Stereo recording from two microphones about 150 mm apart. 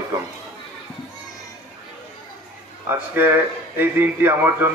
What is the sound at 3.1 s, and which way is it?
A man's voice, 15° right (ahead or behind).